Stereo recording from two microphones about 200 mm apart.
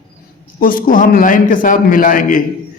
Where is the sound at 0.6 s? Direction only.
45° left (ahead or behind).